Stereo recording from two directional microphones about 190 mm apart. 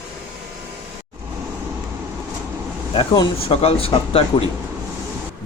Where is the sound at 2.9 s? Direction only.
25° left (ahead or behind).